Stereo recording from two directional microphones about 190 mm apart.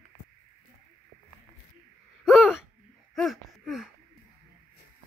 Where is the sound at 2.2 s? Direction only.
Centre (ahead or behind).